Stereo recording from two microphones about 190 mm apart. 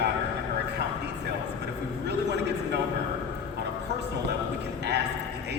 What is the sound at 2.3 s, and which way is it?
Speech, 60° right (ahead or behind).